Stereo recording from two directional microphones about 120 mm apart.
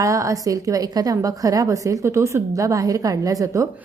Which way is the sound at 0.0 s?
25° right (ahead or behind).